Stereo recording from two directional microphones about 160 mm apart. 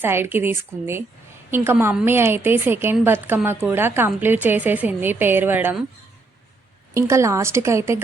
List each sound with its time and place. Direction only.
0.0 s a woman's voice: 15° right (ahead or behind)
6.9 s a woman's voice: 20° right (ahead or behind)